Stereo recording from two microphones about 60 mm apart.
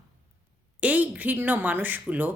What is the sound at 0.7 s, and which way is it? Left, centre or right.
A woman's voice, right.